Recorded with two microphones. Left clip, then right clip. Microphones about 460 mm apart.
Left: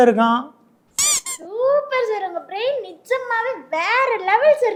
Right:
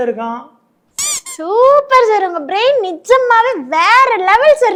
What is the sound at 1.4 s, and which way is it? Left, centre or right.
Speech, right.